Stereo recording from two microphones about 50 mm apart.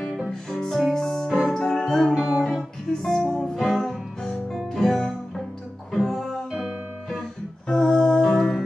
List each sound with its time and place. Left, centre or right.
0.3 s music: centre
7.6 s music: centre